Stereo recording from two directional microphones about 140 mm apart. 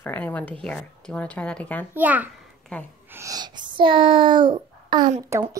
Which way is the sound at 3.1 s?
25° right (ahead or behind).